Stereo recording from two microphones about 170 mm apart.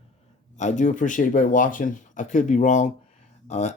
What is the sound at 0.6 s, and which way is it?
Speech, 45° left (ahead or behind).